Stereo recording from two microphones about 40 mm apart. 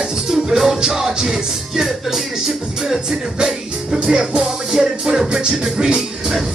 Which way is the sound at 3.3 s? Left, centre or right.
Centre.